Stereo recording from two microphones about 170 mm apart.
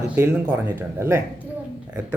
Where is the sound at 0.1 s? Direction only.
10° right (ahead or behind).